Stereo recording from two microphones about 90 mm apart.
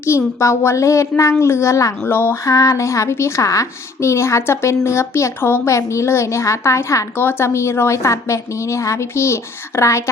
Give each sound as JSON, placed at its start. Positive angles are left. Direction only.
{"t": 0.0, "sound": "a woman's voice", "side_deg": 30}
{"t": 2.0, "sound": "a sound", "side_deg": 25}
{"t": 2.4, "sound": "a woman's voice", "side_deg": 40}